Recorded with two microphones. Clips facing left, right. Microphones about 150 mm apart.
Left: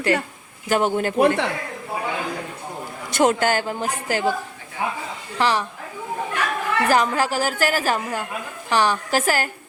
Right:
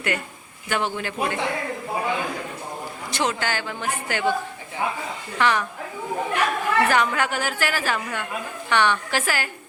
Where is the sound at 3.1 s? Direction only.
45° left (ahead or behind).